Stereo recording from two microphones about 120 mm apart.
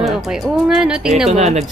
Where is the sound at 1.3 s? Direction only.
65° right (ahead or behind).